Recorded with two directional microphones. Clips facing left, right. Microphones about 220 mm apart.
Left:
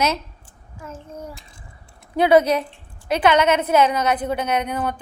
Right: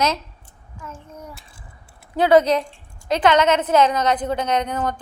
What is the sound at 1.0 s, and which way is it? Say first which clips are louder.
Speech: left 3 dB; 30° left (ahead or behind).